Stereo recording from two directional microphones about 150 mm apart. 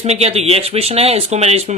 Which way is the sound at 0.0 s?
45° right (ahead or behind).